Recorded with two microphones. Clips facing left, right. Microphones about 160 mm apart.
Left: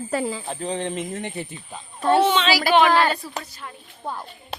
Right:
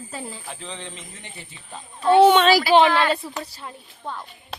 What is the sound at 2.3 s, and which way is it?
Speech, 50° right (ahead or behind).